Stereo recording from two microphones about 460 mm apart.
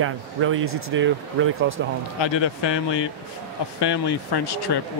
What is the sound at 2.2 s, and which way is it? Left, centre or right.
Speech, left.